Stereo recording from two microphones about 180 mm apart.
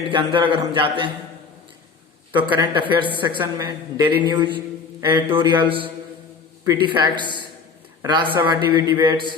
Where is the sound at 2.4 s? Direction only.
25° right (ahead or behind).